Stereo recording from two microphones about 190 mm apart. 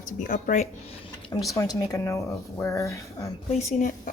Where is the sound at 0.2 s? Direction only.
40° left (ahead or behind).